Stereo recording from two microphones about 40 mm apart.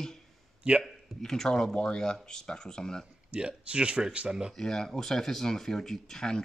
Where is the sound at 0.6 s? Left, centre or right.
Right.